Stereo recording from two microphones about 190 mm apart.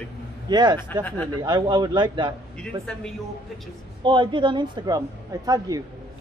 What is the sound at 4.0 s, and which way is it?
A man's voice, 25° right (ahead or behind).